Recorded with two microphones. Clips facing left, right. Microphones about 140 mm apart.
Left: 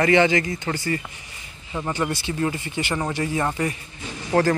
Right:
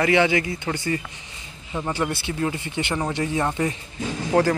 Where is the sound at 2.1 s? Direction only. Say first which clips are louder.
Left 1 dB; 15° left (ahead or behind).